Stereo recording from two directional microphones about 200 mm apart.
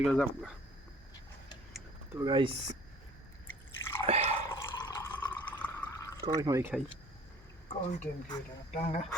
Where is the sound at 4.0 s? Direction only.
30° right (ahead or behind).